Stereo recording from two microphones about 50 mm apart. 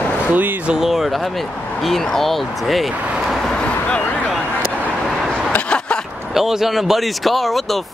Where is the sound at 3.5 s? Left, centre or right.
Left.